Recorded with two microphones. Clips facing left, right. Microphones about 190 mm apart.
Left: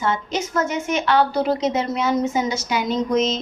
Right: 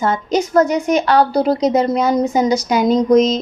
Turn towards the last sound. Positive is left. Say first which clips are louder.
# right 8 dB
turn(degrees=-40)  # may be behind; listen again after turning